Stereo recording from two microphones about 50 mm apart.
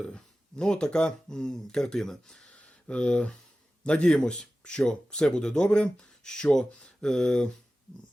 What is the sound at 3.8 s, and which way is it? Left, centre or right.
A man's voice, centre.